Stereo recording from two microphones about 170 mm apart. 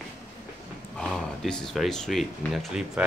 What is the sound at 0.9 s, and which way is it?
Speech, centre (ahead or behind).